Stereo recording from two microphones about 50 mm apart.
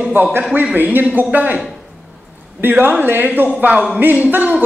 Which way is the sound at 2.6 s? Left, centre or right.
Right.